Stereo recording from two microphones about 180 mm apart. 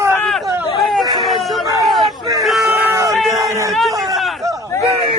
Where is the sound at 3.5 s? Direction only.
15° right (ahead or behind).